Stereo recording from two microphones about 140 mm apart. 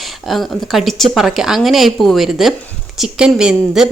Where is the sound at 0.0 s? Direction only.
Centre (ahead or behind).